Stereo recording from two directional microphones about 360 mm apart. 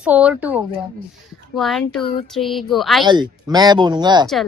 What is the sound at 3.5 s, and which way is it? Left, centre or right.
Speech, centre.